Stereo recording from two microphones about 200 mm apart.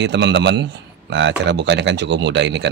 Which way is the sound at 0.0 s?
60° right (ahead or behind).